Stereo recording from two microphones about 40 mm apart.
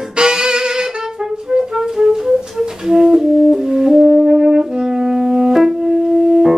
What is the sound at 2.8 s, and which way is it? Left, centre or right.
Brass instrument, centre.